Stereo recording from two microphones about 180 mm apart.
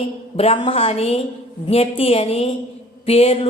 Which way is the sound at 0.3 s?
30° left (ahead or behind).